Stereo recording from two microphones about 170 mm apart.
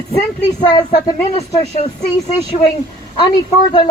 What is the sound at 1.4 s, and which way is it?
Speech, 40° left (ahead or behind).